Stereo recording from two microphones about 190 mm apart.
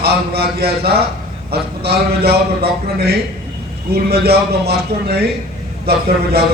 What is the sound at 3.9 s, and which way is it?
A man's voice, 55° right (ahead or behind).